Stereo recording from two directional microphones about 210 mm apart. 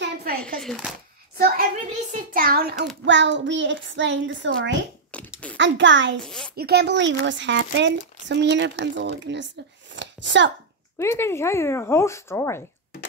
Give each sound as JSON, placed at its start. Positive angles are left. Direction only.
{"t": 0.0, "sound": "a sound", "side_deg": -50}
{"t": 0.6, "sound": "speech", "side_deg": 0}
{"t": 1.4, "sound": "a child's voice", "side_deg": -40}
{"t": 3.1, "sound": "speech", "side_deg": -60}
{"t": 5.1, "sound": "a sound", "side_deg": 5}
{"t": 5.6, "sound": "speech", "side_deg": -60}
{"t": 6.2, "sound": "speech", "side_deg": 5}
{"t": 6.5, "sound": "speech", "side_deg": -50}
{"t": 9.9, "sound": "a sound", "side_deg": -60}
{"t": 11.0, "sound": "speech", "side_deg": 10}